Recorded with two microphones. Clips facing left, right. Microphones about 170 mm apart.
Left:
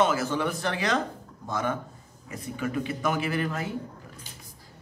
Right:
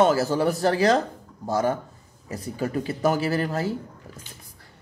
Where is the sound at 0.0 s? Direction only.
40° right (ahead or behind).